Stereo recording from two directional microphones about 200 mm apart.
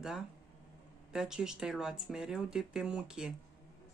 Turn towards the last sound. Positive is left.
turn(degrees=-5)  # may be behind; listen again after turning